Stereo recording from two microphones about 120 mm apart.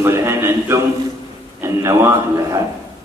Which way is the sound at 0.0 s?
20° right (ahead or behind).